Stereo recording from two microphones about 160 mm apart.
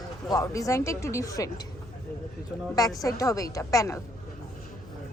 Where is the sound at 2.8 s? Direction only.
20° left (ahead or behind).